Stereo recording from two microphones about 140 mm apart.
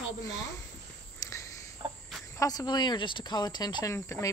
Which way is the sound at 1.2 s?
20° left (ahead or behind).